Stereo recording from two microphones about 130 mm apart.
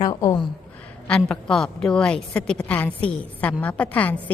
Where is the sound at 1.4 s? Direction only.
5° left (ahead or behind).